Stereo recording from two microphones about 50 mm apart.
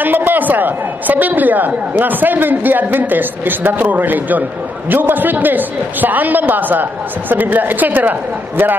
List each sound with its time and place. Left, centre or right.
0.0 s a woman's voice: right